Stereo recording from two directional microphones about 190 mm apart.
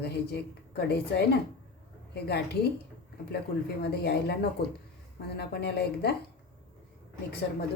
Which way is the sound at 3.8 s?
60° left (ahead or behind).